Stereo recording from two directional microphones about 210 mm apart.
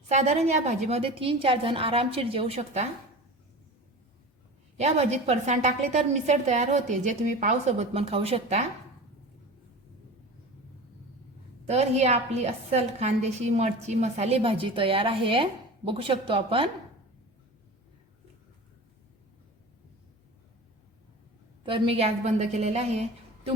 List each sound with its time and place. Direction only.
0.1 s a woman's voice: 35° right (ahead or behind)
4.8 s a woman's voice: 30° right (ahead or behind)
11.6 s a woman's voice: 30° right (ahead or behind)
21.6 s a woman's voice: 25° right (ahead or behind)